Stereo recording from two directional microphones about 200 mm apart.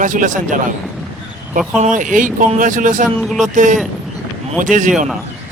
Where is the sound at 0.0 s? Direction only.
40° right (ahead or behind).